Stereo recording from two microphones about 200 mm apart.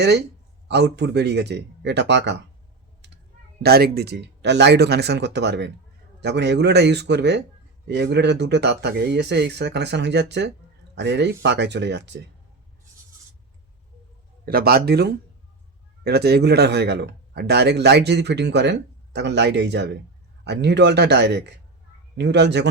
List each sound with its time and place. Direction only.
0.0 s a man's voice: 55° right (ahead or behind)
3.6 s a man's voice: 50° right (ahead or behind)
14.4 s a man's voice: 50° right (ahead or behind)